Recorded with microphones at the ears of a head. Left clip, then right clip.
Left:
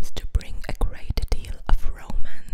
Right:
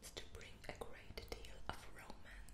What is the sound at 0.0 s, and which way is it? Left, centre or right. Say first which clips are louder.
Whispering: left 16 dB; left.